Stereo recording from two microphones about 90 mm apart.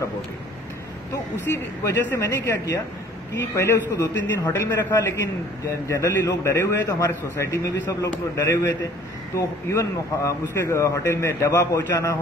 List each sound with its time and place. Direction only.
1.5 s a man's voice: 30° left (ahead or behind)